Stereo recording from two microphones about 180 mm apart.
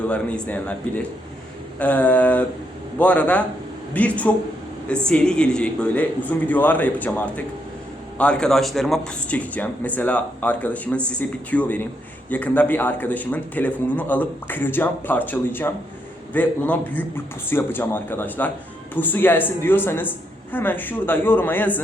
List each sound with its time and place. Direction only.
0.1 s speech: 5° left (ahead or behind)